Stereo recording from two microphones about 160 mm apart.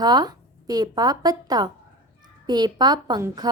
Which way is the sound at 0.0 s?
25° right (ahead or behind).